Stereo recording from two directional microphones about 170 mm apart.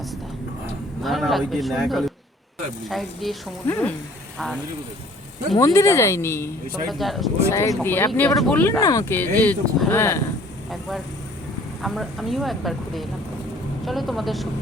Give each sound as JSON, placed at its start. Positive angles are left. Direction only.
{"t": 1.0, "sound": "speech", "side_deg": 0}
{"t": 3.7, "sound": "speech", "side_deg": 10}
{"t": 4.4, "sound": "speech", "side_deg": 0}
{"t": 5.5, "sound": "speech", "side_deg": 20}
{"t": 6.8, "sound": "speech", "side_deg": 0}
{"t": 7.5, "sound": "speech", "side_deg": 15}
{"t": 8.8, "sound": "speech", "side_deg": 20}
{"t": 10.7, "sound": "speech", "side_deg": 0}